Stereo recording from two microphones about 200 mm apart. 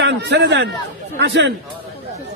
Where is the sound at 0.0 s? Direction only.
60° right (ahead or behind).